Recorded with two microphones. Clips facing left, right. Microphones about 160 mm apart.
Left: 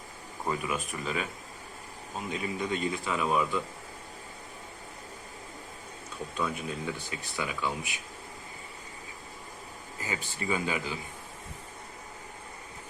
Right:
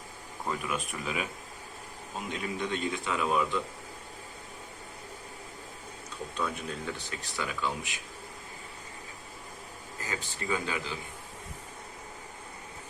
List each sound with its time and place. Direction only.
0.4 s speech: 5° left (ahead or behind)
2.3 s speech: 5° left (ahead or behind)
6.3 s speech: 5° left (ahead or behind)
10.0 s speech: 15° left (ahead or behind)